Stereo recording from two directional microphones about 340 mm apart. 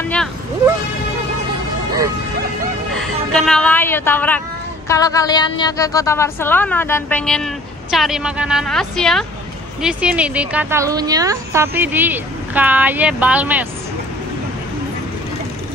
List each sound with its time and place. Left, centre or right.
2.9 s a woman's voice: centre